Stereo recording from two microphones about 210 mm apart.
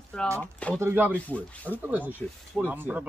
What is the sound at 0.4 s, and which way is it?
Speech, 5° left (ahead or behind).